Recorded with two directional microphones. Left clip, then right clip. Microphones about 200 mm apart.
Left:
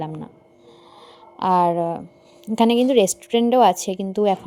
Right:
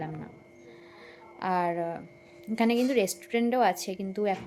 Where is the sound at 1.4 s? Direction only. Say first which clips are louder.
Left 10 dB; 35° left (ahead or behind).